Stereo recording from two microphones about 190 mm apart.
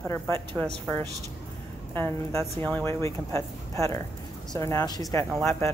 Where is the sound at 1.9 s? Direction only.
10° left (ahead or behind).